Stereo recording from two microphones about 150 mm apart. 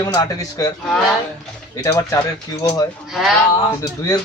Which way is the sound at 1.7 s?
20° left (ahead or behind).